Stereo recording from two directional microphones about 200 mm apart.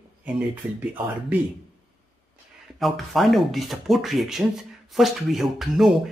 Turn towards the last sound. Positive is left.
turn(degrees=0)  # may be behind; listen again after turning